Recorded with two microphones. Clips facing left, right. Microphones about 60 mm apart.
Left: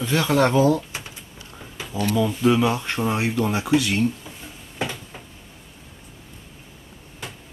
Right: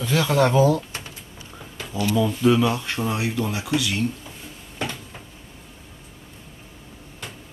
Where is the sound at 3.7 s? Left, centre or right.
Left.